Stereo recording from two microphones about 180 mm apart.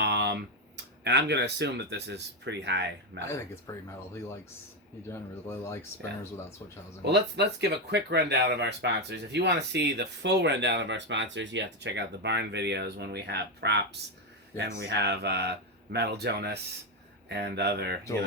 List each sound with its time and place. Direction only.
0.0 s computer keyboard: 70° right (ahead or behind)
1.0 s speech: 70° right (ahead or behind)
3.2 s speech: 15° left (ahead or behind)
7.0 s speech: 65° right (ahead or behind)